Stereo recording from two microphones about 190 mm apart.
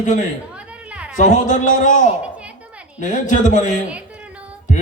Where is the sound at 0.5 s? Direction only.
5° right (ahead or behind).